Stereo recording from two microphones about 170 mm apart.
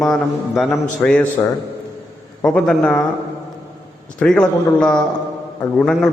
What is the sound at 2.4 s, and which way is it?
Speech, 5° left (ahead or behind).